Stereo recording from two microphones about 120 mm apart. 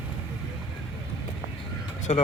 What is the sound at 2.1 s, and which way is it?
Speech, 65° left (ahead or behind).